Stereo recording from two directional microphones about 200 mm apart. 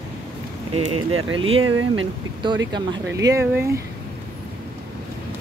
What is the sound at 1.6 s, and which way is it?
Speech, 90° right.